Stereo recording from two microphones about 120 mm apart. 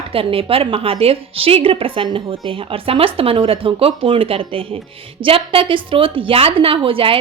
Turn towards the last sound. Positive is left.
turn(degrees=-50)  # may be behind; listen again after turning